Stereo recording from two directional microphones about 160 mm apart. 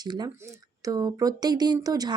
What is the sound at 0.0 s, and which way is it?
Speech, 25° right (ahead or behind).